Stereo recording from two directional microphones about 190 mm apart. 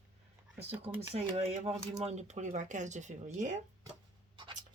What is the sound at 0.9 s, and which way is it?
Speech, 30° right (ahead or behind).